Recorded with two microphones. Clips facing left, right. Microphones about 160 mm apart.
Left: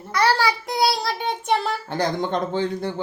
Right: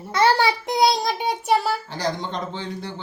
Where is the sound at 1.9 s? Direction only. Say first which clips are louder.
Left 4 dB; 55° left (ahead or behind).